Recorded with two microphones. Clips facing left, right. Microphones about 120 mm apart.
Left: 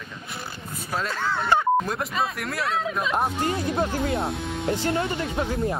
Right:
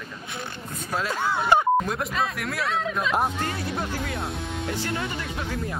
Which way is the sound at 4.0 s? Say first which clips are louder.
Left 5 dB; 25° left (ahead or behind).